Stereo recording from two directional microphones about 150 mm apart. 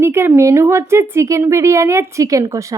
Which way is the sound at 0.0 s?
15° right (ahead or behind).